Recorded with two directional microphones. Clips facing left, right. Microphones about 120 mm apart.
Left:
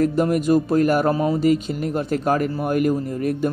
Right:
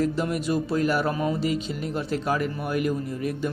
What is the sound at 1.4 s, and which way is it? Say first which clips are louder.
A man's voice: left 8 dB; 50° left (ahead or behind).